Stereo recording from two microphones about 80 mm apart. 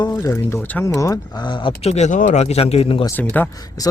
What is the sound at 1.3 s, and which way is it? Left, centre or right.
Speech, left.